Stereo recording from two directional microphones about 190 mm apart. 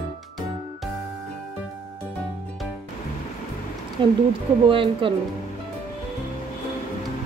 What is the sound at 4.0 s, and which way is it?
Speech, 25° right (ahead or behind).